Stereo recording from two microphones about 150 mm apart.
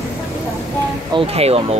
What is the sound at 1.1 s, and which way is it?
Speech, 40° right (ahead or behind).